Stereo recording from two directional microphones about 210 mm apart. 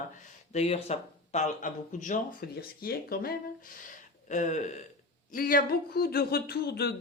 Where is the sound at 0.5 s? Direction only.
30° left (ahead or behind); by 3.3 s 45° left (ahead or behind).